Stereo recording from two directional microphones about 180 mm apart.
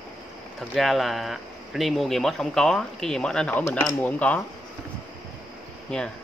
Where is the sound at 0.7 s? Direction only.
Centre (ahead or behind).